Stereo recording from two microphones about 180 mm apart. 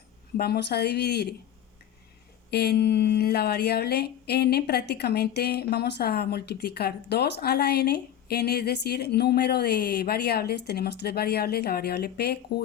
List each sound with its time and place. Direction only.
0.3 s a woman's voice: 60° left (ahead or behind)
2.5 s a woman's voice: 65° left (ahead or behind)